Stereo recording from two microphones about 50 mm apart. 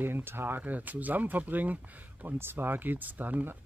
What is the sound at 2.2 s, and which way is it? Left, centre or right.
Speech, right.